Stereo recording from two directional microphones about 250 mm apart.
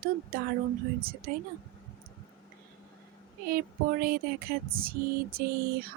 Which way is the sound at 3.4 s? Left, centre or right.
Right.